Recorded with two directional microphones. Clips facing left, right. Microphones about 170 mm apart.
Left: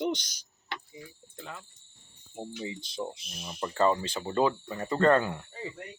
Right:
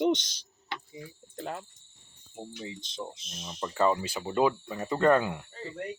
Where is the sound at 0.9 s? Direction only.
45° right (ahead or behind).